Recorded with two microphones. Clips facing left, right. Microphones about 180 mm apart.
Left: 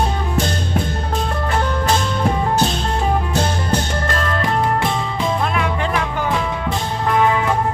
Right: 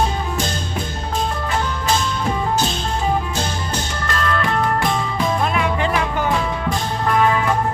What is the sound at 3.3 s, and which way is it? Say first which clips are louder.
Music: left 5 dB; 55° left (ahead or behind).